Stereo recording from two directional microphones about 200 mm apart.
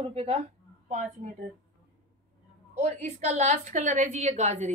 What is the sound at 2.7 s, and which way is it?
A woman's voice, 35° right (ahead or behind).